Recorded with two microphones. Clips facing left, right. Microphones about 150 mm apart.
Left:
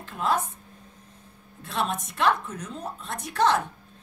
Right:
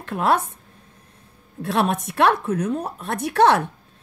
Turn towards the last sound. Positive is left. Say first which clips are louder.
# right 6 dB
turn(degrees=-65)  # may be behind; listen again after turning